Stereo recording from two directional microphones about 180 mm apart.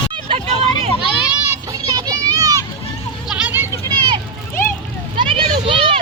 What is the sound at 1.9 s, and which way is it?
Children playing, 20° right (ahead or behind).